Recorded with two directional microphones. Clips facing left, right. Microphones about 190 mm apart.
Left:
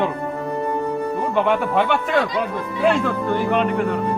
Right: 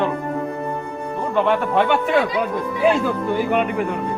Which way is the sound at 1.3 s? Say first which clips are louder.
Right 2 dB; centre (ahead or behind).